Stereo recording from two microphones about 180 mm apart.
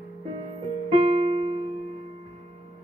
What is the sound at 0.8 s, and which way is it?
Keyboard, 30° right (ahead or behind).